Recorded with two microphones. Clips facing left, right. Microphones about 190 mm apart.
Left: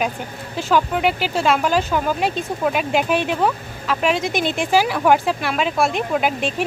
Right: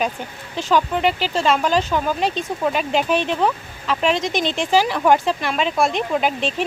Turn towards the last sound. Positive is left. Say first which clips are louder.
# even
turn(degrees=5)  # may be behind; listen again after turning